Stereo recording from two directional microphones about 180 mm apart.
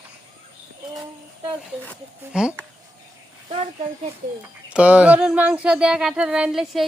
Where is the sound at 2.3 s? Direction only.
5° right (ahead or behind).